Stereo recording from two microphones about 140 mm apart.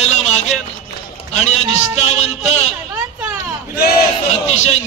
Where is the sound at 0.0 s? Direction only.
50° left (ahead or behind).